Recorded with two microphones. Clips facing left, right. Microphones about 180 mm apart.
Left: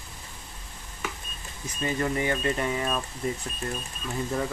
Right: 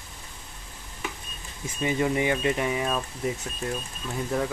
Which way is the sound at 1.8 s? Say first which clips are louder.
Right 3 dB; 15° right (ahead or behind).